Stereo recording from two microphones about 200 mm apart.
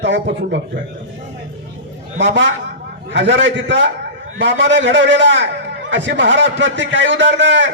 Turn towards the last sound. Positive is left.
turn(degrees=-65)  # may be behind; listen again after turning